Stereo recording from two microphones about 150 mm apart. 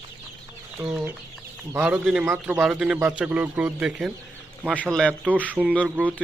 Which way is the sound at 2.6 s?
5° right (ahead or behind).